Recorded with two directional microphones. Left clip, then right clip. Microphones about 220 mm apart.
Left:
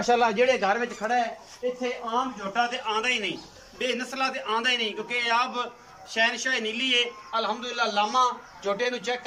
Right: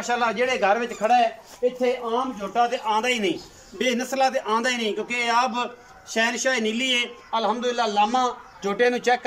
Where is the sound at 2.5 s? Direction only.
25° right (ahead or behind).